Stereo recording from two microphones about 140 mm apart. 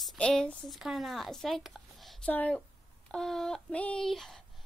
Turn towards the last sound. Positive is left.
turn(degrees=0)  # may be behind; listen again after turning